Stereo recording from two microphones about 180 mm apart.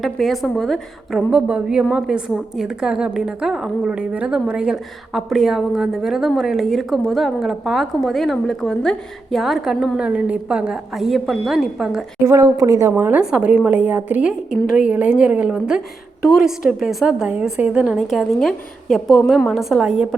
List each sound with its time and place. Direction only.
0.0 s a woman's voice: centre (ahead or behind)
12.2 s a woman's voice: 15° right (ahead or behind)